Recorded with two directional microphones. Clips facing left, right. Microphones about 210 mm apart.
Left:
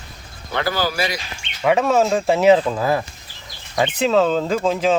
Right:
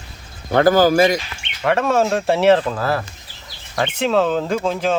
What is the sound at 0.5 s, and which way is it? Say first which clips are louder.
Speech: right 9 dB; 50° right (ahead or behind).